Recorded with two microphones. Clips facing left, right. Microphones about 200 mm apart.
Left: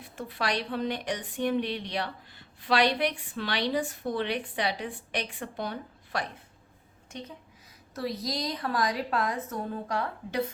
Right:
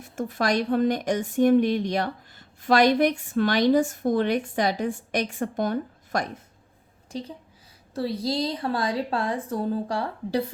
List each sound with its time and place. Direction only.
0.0 s a woman's voice: 45° right (ahead or behind)
7.1 s a woman's voice: 30° right (ahead or behind)